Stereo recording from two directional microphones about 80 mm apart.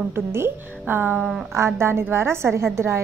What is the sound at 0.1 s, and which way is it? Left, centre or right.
A woman's voice, right.